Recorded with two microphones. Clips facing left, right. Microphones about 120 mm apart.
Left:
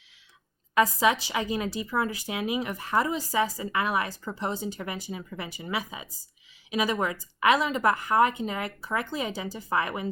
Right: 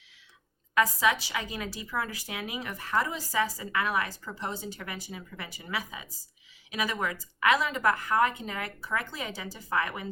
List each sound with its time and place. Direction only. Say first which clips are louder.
0.7 s speech: left 3 dB; 25° left (ahead or behind)